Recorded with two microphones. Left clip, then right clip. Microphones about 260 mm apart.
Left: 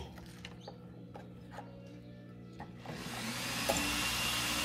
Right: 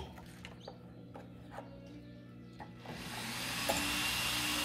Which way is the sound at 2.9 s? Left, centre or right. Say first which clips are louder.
Left 1 dB; left.